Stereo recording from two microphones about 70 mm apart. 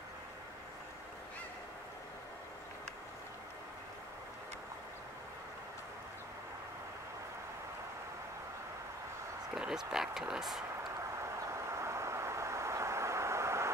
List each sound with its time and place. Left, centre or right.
9.6 s speech: centre
11.0 s vehicle: right